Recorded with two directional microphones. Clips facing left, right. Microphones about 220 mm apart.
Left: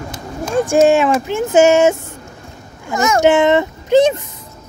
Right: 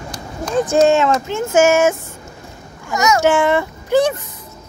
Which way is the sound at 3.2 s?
20° left (ahead or behind).